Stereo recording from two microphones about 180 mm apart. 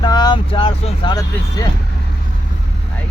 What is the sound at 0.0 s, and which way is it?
Speech, 25° left (ahead or behind).